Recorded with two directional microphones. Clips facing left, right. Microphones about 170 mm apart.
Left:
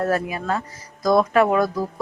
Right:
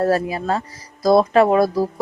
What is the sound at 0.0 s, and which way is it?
A woman's voice, 35° right (ahead or behind).